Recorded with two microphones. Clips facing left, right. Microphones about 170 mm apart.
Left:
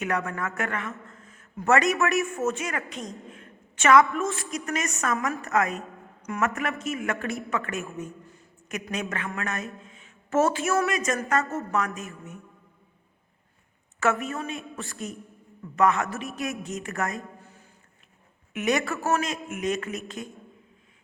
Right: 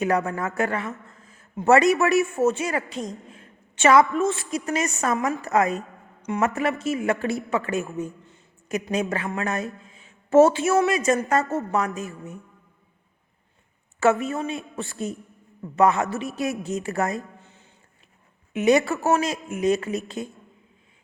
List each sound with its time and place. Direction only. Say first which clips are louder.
0.0 s a man's voice: right 5 dB; 35° right (ahead or behind)
3.3 s a sound: left 1 dB; 35° right (ahead or behind)
4.3 s a man's voice: right 5 dB; 30° right (ahead or behind)
14.0 s a woman's voice: right 5 dB; 30° right (ahead or behind)